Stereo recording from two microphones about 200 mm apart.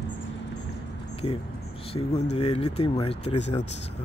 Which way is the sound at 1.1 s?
30° left (ahead or behind).